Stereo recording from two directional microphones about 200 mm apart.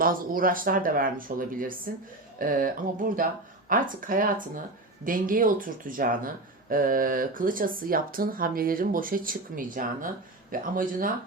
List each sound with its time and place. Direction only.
0.0 s speech: 45° right (ahead or behind)